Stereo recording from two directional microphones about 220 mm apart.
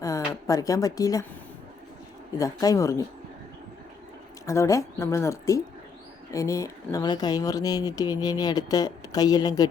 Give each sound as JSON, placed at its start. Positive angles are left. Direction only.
{"t": 0.0, "sound": "a woman's voice", "side_deg": 15}
{"t": 2.4, "sound": "speech", "side_deg": 15}
{"t": 4.4, "sound": "speech", "side_deg": 15}